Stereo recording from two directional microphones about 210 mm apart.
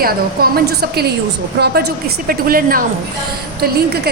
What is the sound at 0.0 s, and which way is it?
A woman's voice, 45° right (ahead or behind).